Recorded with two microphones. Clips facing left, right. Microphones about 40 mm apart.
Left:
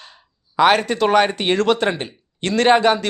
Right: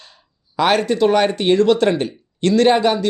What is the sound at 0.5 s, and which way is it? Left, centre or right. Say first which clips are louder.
Speech: left 1 dB; left.